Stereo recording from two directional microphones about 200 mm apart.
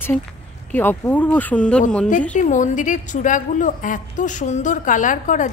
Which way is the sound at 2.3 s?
40° left (ahead or behind).